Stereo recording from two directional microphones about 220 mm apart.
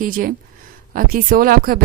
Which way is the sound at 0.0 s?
40° right (ahead or behind).